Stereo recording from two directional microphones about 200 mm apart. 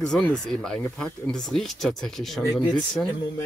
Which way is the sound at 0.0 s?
5° left (ahead or behind).